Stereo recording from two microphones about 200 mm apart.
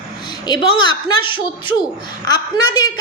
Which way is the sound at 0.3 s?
20° left (ahead or behind).